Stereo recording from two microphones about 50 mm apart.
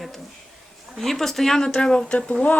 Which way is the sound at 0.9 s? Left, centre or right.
Centre.